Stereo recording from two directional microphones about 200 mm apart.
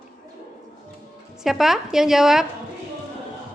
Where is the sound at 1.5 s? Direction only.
Centre (ahead or behind).